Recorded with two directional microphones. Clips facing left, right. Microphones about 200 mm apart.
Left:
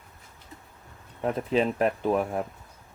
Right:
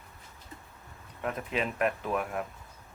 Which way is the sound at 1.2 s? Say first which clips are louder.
Left 7 dB; 30° left (ahead or behind).